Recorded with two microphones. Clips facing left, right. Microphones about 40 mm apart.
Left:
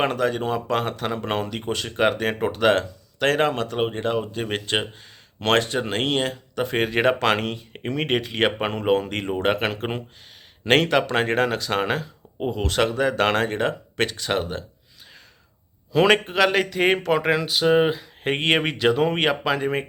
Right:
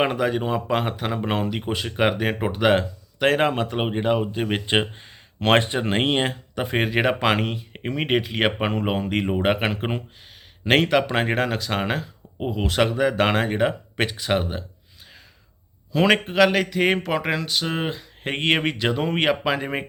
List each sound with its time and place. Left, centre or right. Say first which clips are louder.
0.0 s speech: even; centre
6.7 s speech: left 1 dB; centre
15.9 s speech: left 1 dB; centre